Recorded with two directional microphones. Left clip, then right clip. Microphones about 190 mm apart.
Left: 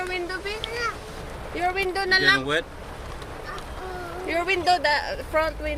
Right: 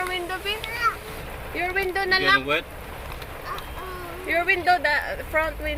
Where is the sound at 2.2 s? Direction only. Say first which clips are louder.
Even; 40° left (ahead or behind).